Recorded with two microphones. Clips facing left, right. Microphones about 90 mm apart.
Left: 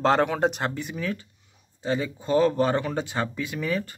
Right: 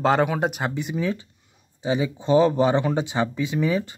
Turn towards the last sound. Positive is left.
turn(degrees=-20)  # may be behind; listen again after turning